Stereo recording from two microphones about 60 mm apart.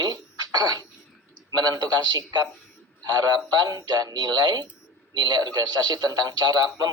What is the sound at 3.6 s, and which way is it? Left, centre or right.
Speech, right.